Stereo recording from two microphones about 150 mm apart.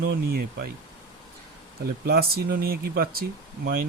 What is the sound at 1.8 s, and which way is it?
Speech, 90° right.